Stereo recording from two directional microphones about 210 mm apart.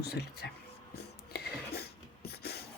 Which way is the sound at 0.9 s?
50° left (ahead or behind).